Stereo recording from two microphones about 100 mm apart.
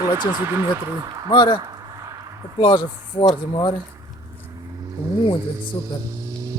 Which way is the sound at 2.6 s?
55° left (ahead or behind).